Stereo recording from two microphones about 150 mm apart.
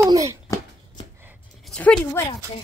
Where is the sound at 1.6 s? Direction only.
5° left (ahead or behind).